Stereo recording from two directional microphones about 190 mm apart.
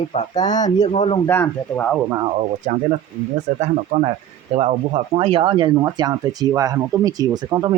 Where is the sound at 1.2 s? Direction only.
10° left (ahead or behind).